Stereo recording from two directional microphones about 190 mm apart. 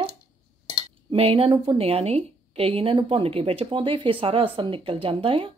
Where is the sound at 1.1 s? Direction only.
30° right (ahead or behind).